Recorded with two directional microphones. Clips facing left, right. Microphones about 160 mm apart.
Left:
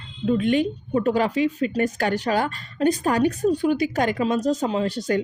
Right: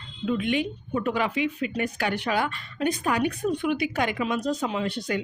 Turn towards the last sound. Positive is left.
turn(degrees=40)  # may be behind; listen again after turning